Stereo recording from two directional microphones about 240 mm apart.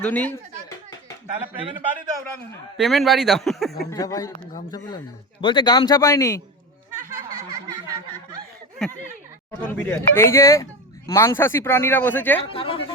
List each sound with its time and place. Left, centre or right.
0.0 s a sound: centre
2.7 s speech: centre
3.8 s speech: centre
5.4 s speech: centre
9.5 s speech: centre
12.5 s speech: left